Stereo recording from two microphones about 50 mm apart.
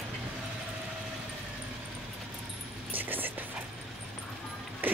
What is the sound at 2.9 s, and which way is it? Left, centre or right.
Music, right.